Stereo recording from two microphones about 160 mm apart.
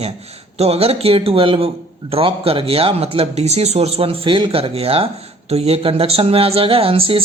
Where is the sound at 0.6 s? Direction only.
40° right (ahead or behind).